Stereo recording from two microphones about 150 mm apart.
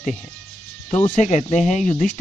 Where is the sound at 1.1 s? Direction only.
50° left (ahead or behind).